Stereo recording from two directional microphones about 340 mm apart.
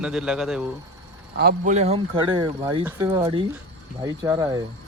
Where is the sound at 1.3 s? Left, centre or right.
Right.